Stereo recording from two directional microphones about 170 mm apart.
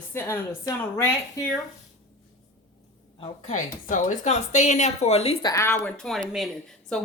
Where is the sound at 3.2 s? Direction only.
45° left (ahead or behind).